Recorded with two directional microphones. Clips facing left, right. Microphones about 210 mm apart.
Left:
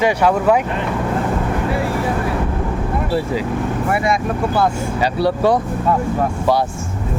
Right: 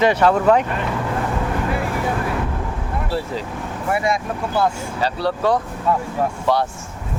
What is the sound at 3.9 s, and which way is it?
Speech, 65° left (ahead or behind).